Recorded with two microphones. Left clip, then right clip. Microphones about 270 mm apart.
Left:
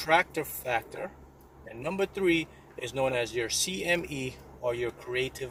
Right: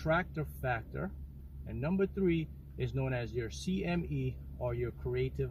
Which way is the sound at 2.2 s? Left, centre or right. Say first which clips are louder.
Left 7 dB; centre.